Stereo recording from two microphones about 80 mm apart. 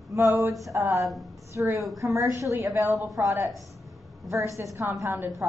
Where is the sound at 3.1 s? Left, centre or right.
Right.